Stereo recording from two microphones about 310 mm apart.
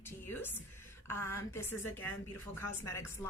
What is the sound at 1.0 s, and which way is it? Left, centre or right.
Speech, centre.